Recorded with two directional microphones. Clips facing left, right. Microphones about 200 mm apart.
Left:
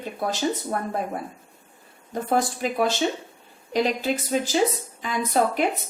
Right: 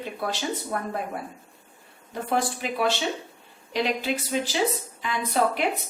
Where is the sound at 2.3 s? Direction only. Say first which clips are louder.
Left 3 dB; 45° left (ahead or behind).